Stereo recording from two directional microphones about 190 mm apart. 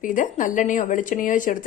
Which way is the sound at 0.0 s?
45° left (ahead or behind).